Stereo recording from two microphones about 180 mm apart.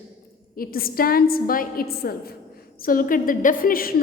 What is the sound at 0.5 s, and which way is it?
A woman's voice, 55° left (ahead or behind).